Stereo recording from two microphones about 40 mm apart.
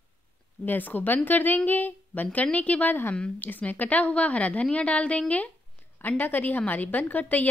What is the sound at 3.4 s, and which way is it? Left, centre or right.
A woman's voice, left.